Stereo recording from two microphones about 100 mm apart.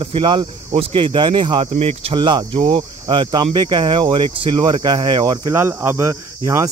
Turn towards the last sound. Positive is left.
turn(degrees=-30)  # may be behind; listen again after turning